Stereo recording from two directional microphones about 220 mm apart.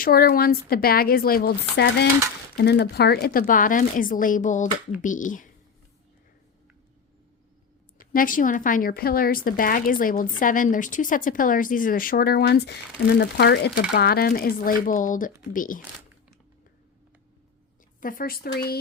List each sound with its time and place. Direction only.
0.0 s a woman's voice: 45° left (ahead or behind)
7.9 s a woman's voice: 40° left (ahead or behind)
18.0 s a woman's voice: 40° left (ahead or behind)